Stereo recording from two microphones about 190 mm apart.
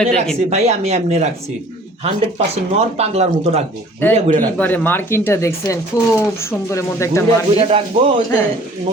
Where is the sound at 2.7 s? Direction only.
35° right (ahead or behind).